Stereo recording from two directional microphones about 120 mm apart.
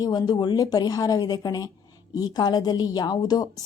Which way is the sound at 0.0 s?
35° left (ahead or behind).